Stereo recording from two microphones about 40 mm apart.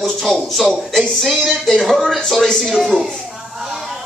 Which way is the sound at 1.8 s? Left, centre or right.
Centre.